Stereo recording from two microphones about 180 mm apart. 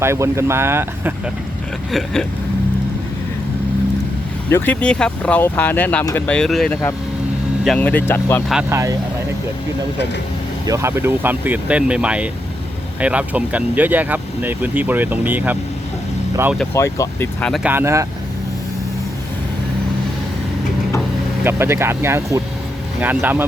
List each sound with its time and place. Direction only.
0.0 s speech: 15° right (ahead or behind)
1.9 s vehicle: centre (ahead or behind)
4.4 s speech: 10° left (ahead or behind)
8.7 s speech: 15° right (ahead or behind)
10.7 s speech: 15° right (ahead or behind)
16.7 s speech: 15° left (ahead or behind)
17.4 s vehicle: centre (ahead or behind)
17.7 s speech: 15° right (ahead or behind)
21.4 s speech: 15° right (ahead or behind)